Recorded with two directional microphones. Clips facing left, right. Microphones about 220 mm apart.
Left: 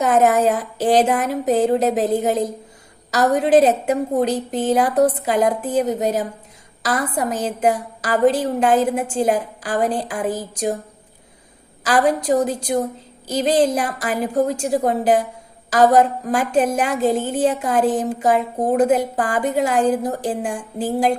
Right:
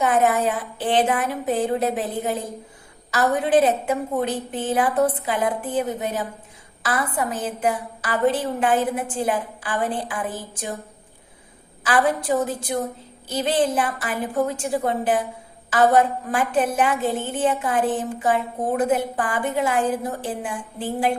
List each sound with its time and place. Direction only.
0.0 s a woman's voice: 40° left (ahead or behind)
11.8 s a woman's voice: 40° left (ahead or behind)